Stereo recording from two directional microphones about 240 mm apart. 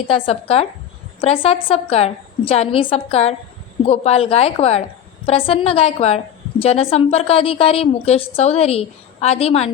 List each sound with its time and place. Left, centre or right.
0.1 s a woman's voice: left